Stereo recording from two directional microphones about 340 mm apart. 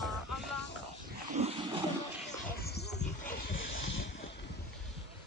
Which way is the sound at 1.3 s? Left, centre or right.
Centre.